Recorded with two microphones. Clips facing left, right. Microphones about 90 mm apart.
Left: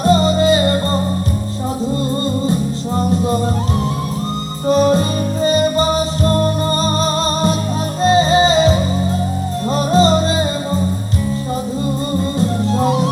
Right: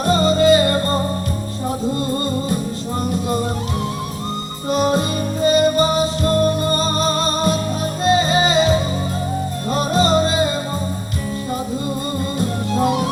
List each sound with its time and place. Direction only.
0.0 s music: 25° left (ahead or behind)
4.7 s music: 35° left (ahead or behind)
12.4 s music: 30° left (ahead or behind)